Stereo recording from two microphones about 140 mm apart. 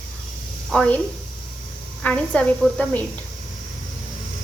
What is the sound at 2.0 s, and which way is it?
Speech, 10° left (ahead or behind).